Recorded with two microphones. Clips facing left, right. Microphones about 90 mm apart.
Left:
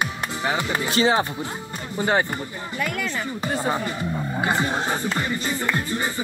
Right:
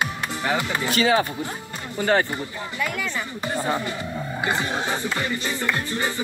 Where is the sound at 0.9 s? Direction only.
30° left (ahead or behind).